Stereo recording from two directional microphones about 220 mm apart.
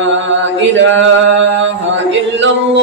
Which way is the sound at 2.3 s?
55° right (ahead or behind).